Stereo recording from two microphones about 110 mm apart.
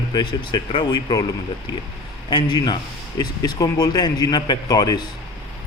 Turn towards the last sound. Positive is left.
turn(degrees=35)  # may be behind; listen again after turning